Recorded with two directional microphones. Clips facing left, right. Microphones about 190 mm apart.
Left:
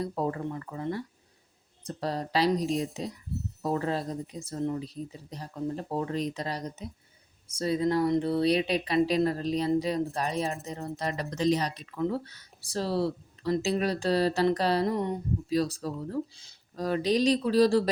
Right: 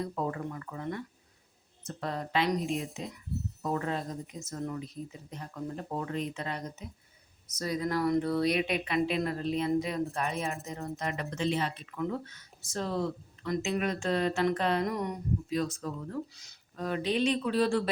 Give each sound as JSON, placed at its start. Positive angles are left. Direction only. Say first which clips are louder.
{"t": 0.0, "sound": "speech", "louder": "left 3 dB", "side_deg": 35}